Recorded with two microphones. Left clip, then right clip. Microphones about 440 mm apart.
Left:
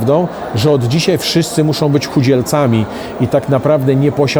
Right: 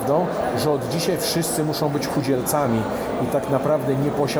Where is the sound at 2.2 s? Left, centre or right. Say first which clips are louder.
Left 8 dB; left.